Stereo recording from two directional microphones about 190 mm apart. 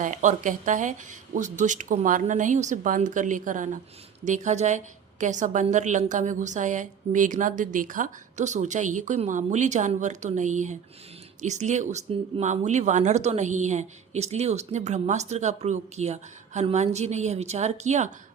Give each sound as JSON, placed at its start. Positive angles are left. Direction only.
{"t": 0.0, "sound": "speech", "side_deg": -40}